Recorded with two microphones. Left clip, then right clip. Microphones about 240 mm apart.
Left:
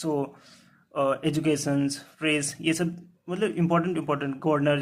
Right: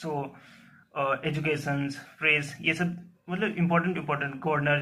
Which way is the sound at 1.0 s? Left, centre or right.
Left.